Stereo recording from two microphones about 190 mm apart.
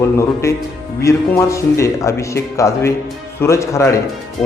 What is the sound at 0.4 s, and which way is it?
A man's voice, 15° left (ahead or behind).